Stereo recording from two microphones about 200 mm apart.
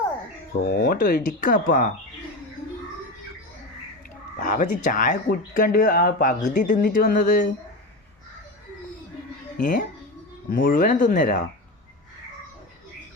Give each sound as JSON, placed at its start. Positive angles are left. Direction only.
{"t": 0.5, "sound": "speech", "side_deg": 50}
{"t": 4.4, "sound": "speech", "side_deg": 40}
{"t": 9.6, "sound": "speech", "side_deg": 40}